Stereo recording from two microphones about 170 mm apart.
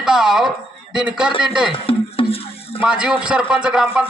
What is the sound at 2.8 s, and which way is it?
Speech, 5° right (ahead or behind).